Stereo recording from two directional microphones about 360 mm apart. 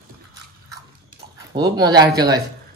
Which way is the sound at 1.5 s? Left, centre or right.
Centre.